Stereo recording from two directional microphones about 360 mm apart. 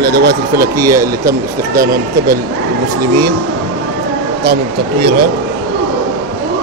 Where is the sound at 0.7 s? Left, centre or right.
Centre.